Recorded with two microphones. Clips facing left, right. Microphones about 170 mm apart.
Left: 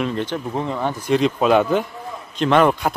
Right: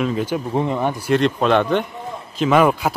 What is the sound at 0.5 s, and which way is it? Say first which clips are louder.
Speech: right 3 dB; 15° right (ahead or behind).